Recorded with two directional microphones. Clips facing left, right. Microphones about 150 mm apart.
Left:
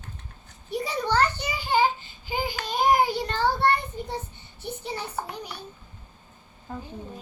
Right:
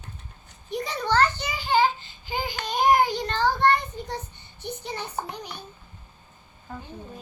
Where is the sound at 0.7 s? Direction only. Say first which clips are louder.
Even; 10° left (ahead or behind).